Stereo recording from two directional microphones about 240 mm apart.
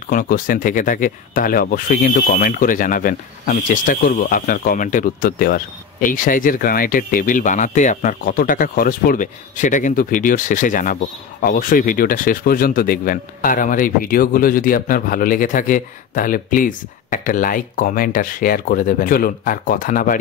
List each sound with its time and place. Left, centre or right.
0.1 s speech: left